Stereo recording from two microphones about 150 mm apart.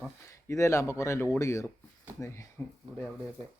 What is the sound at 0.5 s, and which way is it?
Speech, 20° left (ahead or behind).